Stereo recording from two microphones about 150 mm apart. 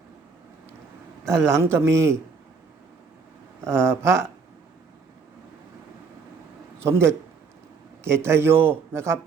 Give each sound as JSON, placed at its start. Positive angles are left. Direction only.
{"t": 1.5, "sound": "a man's voice", "side_deg": -15}
{"t": 3.6, "sound": "a man's voice", "side_deg": -15}
{"t": 6.8, "sound": "a man's voice", "side_deg": -15}